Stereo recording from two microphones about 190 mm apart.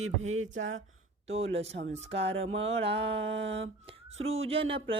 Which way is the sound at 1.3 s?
30° right (ahead or behind).